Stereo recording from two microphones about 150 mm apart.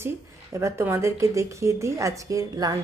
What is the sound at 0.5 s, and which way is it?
A woman's voice, 15° right (ahead or behind).